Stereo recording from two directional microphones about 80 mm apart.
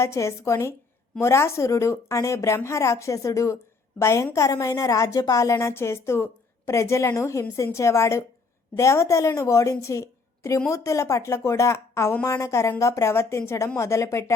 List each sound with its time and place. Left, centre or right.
0.0 s a woman's voice: left